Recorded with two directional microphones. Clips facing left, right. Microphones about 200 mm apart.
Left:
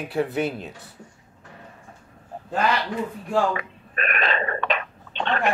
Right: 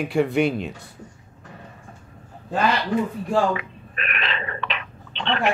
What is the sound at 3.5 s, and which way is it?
Burping, 45° left (ahead or behind).